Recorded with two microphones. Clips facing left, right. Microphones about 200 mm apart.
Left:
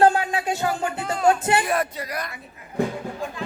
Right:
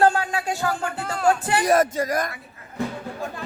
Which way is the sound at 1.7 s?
45° right (ahead or behind).